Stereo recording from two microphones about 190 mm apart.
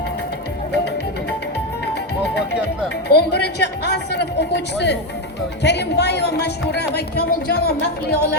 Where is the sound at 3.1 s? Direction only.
60° left (ahead or behind).